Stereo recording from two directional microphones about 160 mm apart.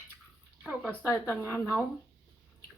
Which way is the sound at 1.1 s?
15° left (ahead or behind).